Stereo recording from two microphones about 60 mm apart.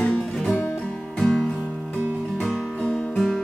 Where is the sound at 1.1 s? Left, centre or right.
Centre.